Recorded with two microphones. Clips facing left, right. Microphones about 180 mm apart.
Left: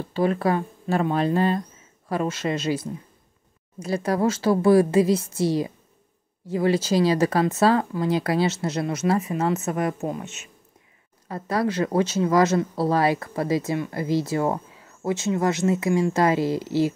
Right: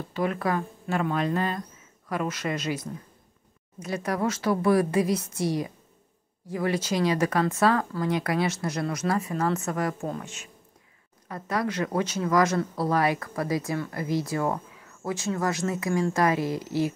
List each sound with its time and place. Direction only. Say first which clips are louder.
0.1 s speech: left 5 dB; 30° left (ahead or behind)